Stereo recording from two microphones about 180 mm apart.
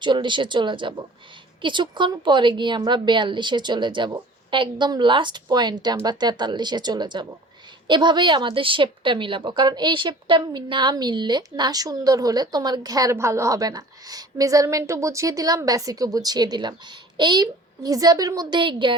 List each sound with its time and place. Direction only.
0.0 s a woman's voice: 25° right (ahead or behind)